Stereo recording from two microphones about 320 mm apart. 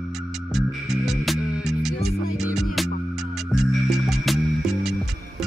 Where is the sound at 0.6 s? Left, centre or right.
Centre.